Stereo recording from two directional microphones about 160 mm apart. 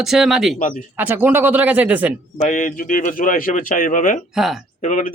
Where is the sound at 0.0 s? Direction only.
5° right (ahead or behind).